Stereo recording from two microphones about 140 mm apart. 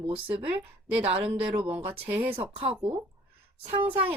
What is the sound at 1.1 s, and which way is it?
Speech, 35° right (ahead or behind).